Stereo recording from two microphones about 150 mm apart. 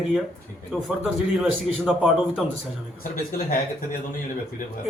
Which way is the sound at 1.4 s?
5° right (ahead or behind).